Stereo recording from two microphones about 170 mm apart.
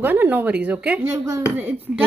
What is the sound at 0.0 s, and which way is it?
A child's voice, 10° right (ahead or behind).